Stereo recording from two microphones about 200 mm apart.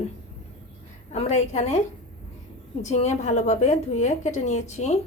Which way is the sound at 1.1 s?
35° left (ahead or behind).